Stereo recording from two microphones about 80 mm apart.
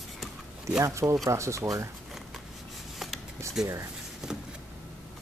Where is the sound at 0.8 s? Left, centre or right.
Right.